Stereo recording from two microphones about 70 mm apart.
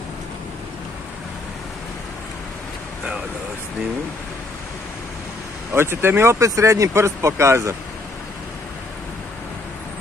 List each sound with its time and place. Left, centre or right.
5.7 s speech: right
6.4 s speech: right